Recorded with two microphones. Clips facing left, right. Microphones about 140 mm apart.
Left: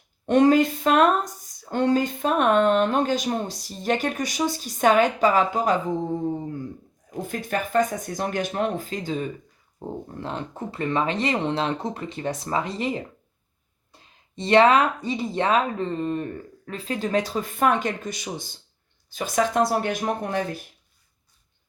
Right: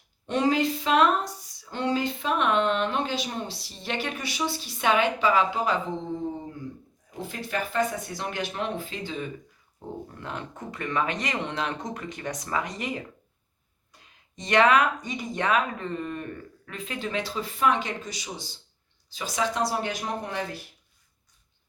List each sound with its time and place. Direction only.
0.3 s speech: 50° left (ahead or behind)
7.1 s a woman's voice: 50° left (ahead or behind)